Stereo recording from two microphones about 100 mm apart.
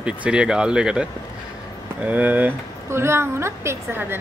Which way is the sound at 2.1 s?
15° right (ahead or behind).